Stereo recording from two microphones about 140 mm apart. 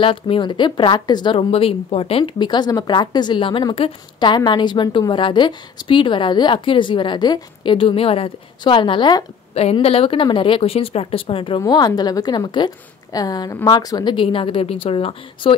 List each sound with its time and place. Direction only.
0.0 s speech: 40° left (ahead or behind)
9.5 s speech: 45° left (ahead or behind)